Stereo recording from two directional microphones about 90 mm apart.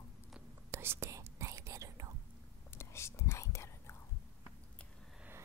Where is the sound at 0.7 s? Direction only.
25° right (ahead or behind).